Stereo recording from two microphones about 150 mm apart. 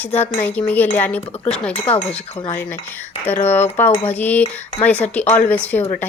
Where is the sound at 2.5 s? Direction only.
20° left (ahead or behind).